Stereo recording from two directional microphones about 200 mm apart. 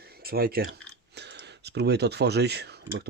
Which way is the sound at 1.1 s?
55° right (ahead or behind).